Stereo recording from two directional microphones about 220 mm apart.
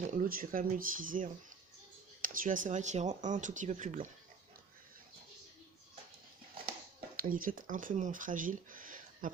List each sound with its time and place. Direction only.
0.1 s speech: 40° right (ahead or behind)
7.2 s speech: 40° right (ahead or behind)